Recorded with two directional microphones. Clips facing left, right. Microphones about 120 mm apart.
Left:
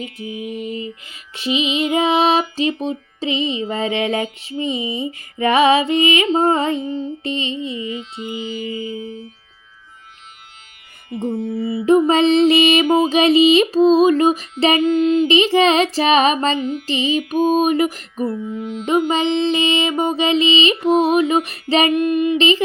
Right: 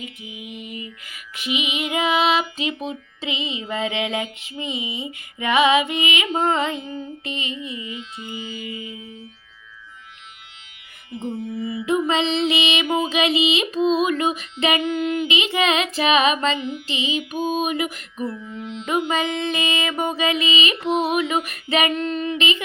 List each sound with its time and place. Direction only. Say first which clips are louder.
0.0 s music: left 9 dB; 40° left (ahead or behind)
11.1 s music: left 6 dB; 60° left (ahead or behind)
11.6 s music: left 8 dB; 35° left (ahead or behind); by 18.9 s 50° left (ahead or behind)
19.1 s music: left 6 dB; 25° left (ahead or behind)
21.9 s music: left 8 dB; 15° left (ahead or behind)
22.4 s music: left 7 dB; 35° left (ahead or behind)